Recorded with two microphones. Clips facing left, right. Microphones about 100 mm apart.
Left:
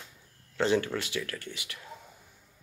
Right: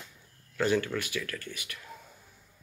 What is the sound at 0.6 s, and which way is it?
Speech, 25° left (ahead or behind).